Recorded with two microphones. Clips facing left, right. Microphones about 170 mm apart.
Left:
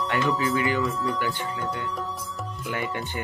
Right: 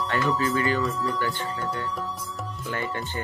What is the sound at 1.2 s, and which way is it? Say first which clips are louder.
Speech: even; 15° left (ahead or behind).